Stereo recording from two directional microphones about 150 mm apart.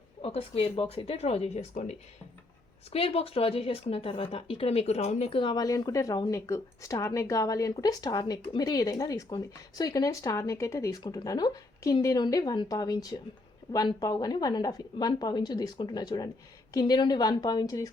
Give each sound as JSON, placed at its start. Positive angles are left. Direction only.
{"t": 0.2, "sound": "a woman's voice", "side_deg": 40}